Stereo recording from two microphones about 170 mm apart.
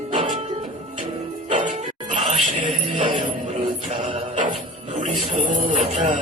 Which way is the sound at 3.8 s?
40° right (ahead or behind).